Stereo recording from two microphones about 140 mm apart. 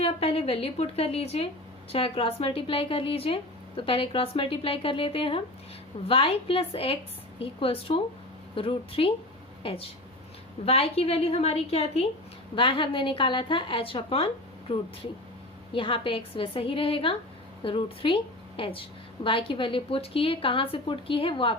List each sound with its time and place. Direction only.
0.0 s a woman's voice: 45° left (ahead or behind)
10.7 s a woman's voice: 45° left (ahead or behind)
15.7 s a woman's voice: 40° left (ahead or behind)